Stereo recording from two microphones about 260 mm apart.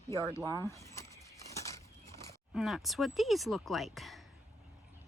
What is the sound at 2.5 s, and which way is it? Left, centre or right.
Speech, centre.